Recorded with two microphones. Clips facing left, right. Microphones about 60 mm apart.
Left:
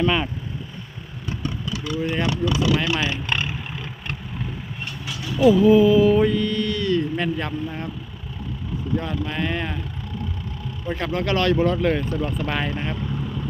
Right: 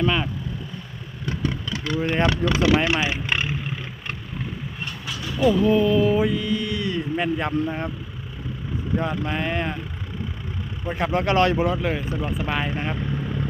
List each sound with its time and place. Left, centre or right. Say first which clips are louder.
0.0 s speech: left 1 dB; centre
1.2 s vehicle: right 2 dB; right
2.1 s speech: right 2 dB; right
2.8 s speech: right 1 dB; centre
3.3 s roar: right 1 dB; centre
5.4 s mantra: left 4 dB; centre; by 7.9 s right
9.0 s speech: right 2 dB; right
10.8 s speech: right 2 dB; right
12.4 s mantra: even; centre
12.7 s speech: right 1 dB; right